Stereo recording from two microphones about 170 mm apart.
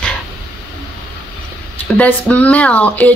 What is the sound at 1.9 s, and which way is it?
Speech, 10° left (ahead or behind).